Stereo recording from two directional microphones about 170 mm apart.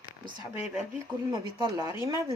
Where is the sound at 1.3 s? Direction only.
20° right (ahead or behind).